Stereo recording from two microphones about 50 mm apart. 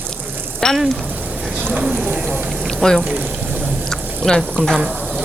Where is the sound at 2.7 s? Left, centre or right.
Centre.